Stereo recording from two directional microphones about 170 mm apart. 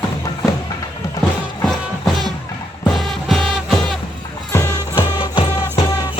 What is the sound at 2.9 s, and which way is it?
Music, centre (ahead or behind).